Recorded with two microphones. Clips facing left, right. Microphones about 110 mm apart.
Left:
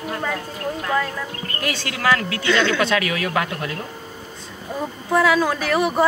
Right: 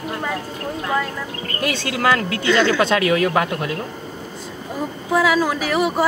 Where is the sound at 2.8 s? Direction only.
25° right (ahead or behind).